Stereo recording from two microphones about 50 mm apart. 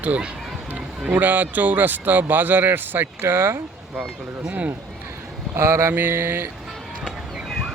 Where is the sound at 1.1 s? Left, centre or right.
Right.